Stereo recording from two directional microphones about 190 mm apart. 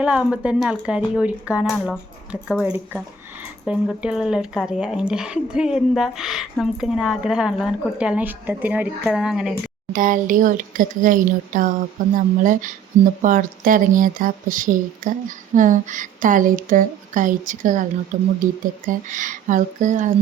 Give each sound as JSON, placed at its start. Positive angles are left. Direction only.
{"t": 0.0, "sound": "speech", "side_deg": -5}
{"t": 9.9, "sound": "speech", "side_deg": -45}